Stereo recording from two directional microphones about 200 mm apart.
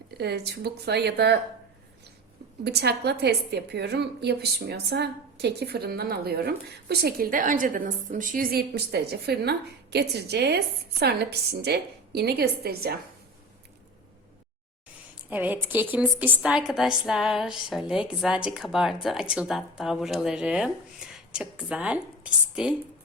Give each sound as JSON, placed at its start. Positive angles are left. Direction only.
{"t": 0.2, "sound": "a woman's voice", "side_deg": -55}
{"t": 2.6, "sound": "a woman's voice", "side_deg": -55}
{"t": 15.3, "sound": "a woman's voice", "side_deg": -10}